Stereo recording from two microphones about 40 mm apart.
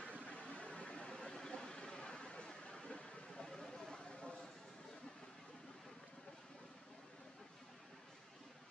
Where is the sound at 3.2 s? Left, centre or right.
Centre.